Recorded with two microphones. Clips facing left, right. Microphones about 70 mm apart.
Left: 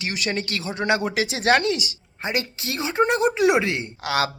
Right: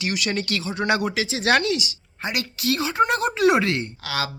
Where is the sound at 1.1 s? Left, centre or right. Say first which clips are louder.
Left 1 dB; left.